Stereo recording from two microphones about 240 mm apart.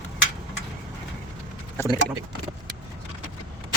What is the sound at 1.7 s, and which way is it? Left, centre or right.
Speech, centre.